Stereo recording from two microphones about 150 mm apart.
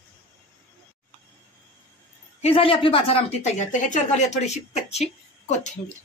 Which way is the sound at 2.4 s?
40° left (ahead or behind).